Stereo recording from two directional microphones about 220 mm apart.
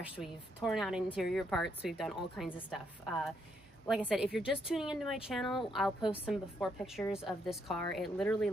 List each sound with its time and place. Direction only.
0.0 s a woman's voice: 5° right (ahead or behind)